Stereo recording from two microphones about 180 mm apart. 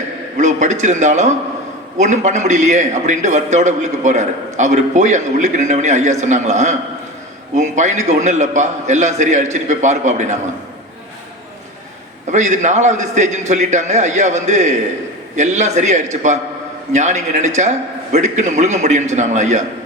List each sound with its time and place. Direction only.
0.3 s a man's voice: 40° right (ahead or behind)
12.3 s a man's voice: 40° right (ahead or behind)